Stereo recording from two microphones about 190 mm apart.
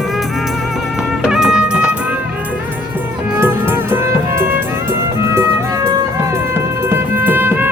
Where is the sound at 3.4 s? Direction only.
10° right (ahead or behind).